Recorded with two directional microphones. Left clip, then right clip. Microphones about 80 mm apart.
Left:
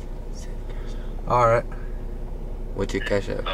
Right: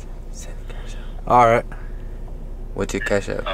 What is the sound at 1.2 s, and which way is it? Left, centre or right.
Speech, centre.